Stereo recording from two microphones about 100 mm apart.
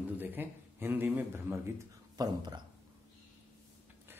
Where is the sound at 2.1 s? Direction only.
45° right (ahead or behind).